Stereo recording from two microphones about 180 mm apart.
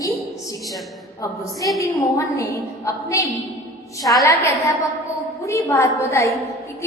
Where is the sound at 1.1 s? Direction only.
15° left (ahead or behind).